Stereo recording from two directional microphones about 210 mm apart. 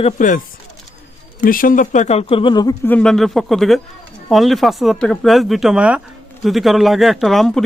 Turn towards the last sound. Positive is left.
turn(degrees=0)  # may be behind; listen again after turning